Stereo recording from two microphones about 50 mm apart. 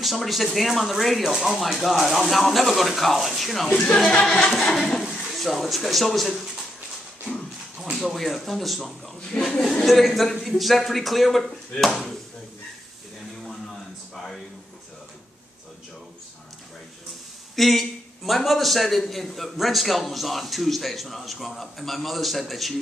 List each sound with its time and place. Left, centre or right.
0.0 s a man's voice: centre
4.2 s a man's voice: centre
7.9 s a man's voice: centre
11.4 s speech: centre
13.4 s music: centre
17.6 s a man's voice: centre